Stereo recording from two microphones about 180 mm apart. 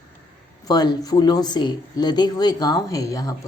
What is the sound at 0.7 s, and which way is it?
Speech, 20° left (ahead or behind).